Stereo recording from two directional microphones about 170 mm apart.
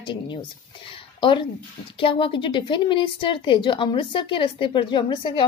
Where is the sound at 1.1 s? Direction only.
30° left (ahead or behind).